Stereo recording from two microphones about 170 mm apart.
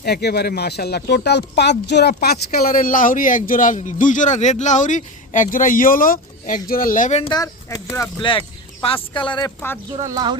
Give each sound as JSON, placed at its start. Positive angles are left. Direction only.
{"t": 0.0, "sound": "speech", "side_deg": 70}
{"t": 7.2, "sound": "speech", "side_deg": 25}
{"t": 8.2, "sound": "speech", "side_deg": 30}
{"t": 10.0, "sound": "speech", "side_deg": -20}